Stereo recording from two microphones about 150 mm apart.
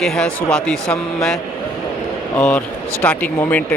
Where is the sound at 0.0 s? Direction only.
5° left (ahead or behind).